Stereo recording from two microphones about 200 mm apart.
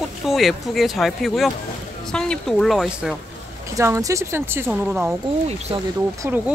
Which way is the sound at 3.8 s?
15° right (ahead or behind).